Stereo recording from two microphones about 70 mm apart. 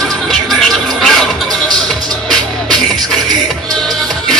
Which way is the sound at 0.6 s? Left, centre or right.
Centre.